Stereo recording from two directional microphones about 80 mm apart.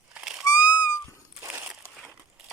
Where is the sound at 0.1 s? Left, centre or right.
Centre.